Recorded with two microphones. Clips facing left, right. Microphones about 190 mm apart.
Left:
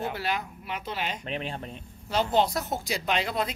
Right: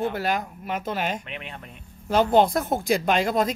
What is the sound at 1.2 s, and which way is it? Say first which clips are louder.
Speech: left 5 dB; 35° left (ahead or behind).